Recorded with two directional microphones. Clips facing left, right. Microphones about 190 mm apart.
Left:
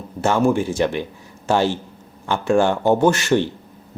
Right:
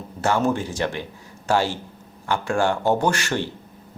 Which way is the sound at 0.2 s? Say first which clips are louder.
Left 4 dB; 15° left (ahead or behind).